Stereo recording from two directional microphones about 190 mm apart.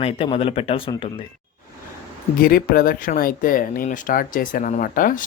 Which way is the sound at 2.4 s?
50° left (ahead or behind).